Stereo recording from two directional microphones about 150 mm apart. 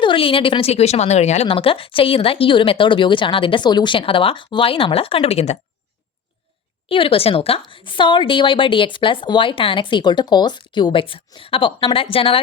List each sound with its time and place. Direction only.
0.0 s speech: 35° left (ahead or behind)
6.8 s speech: 35° left (ahead or behind)